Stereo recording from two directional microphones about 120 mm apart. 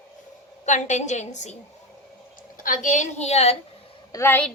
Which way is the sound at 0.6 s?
80° left.